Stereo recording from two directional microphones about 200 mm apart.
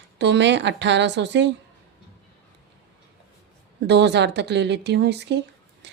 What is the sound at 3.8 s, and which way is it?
Speech, 60° right (ahead or behind).